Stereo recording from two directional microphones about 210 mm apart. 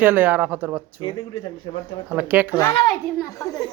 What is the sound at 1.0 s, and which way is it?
Speech, 25° left (ahead or behind).